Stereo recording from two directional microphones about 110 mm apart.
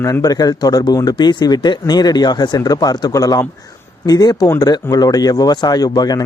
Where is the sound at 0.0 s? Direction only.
30° left (ahead or behind).